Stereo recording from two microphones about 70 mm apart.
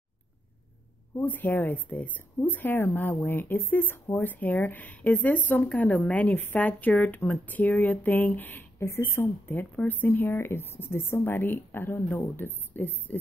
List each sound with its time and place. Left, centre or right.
1.2 s a woman's voice: left